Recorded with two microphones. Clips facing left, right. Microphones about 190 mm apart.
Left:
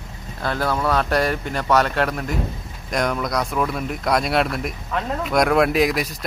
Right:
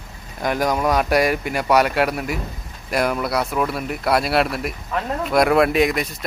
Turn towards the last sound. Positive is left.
turn(degrees=0)  # may be behind; listen again after turning